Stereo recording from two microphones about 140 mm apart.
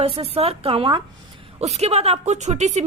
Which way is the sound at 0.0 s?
45° right (ahead or behind).